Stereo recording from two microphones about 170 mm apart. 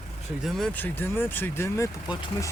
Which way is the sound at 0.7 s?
10° left (ahead or behind).